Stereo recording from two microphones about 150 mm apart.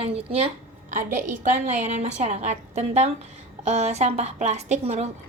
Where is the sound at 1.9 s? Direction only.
50° right (ahead or behind).